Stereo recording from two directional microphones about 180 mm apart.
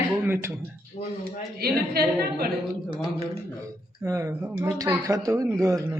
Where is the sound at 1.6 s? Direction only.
60° right (ahead or behind).